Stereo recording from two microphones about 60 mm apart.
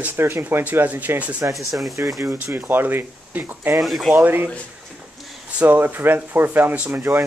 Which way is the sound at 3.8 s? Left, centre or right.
Centre.